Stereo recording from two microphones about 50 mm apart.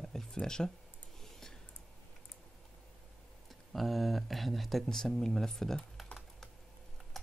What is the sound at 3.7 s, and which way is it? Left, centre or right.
Speech, centre.